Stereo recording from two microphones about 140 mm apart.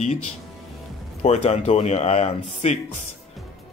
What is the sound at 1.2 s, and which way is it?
Speech, 50° left (ahead or behind).